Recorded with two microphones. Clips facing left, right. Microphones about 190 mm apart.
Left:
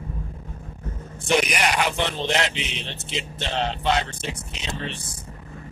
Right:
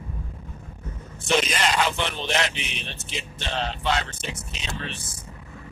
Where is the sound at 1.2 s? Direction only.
15° left (ahead or behind).